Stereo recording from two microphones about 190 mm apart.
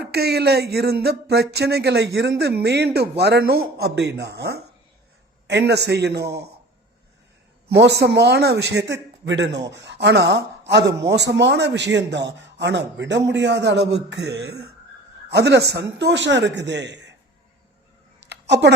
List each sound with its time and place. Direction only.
0.0 s a man's voice: 60° right (ahead or behind)
7.7 s a man's voice: 60° right (ahead or behind)
18.2 s a sound: 65° right (ahead or behind)